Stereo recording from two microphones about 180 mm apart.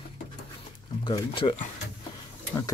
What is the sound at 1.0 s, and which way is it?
Speech, 25° left (ahead or behind).